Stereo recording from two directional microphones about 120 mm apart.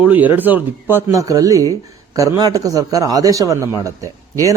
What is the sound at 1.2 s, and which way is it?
Speech, 30° right (ahead or behind).